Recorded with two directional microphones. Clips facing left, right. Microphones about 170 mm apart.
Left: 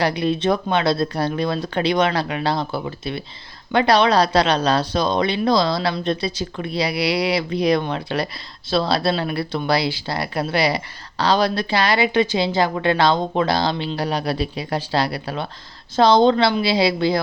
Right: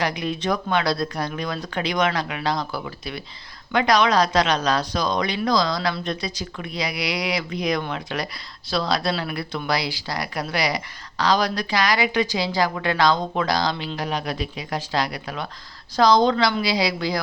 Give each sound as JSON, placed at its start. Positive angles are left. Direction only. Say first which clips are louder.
{"t": 0.0, "sound": "speech", "louder": "left 5 dB", "side_deg": 30}